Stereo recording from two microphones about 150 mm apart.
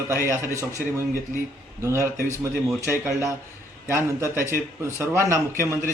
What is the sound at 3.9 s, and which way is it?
A man's voice, 20° right (ahead or behind).